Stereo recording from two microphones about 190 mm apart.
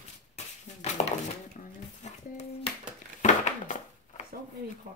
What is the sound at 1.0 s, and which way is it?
Dishes, 35° left (ahead or behind).